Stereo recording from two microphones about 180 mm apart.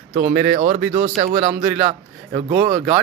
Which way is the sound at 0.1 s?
45° right (ahead or behind).